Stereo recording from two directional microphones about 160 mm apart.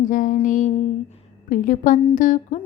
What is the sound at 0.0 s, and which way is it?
Music, 55° left (ahead or behind).